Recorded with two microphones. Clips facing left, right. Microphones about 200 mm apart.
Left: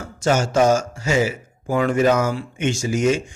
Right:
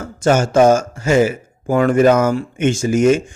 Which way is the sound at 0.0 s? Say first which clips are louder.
Right 5 dB; 55° right (ahead or behind).